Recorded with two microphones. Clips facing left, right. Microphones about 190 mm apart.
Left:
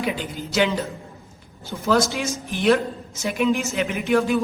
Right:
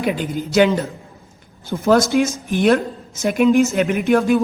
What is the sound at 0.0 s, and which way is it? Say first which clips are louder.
Speech: right 5 dB; 50° right (ahead or behind).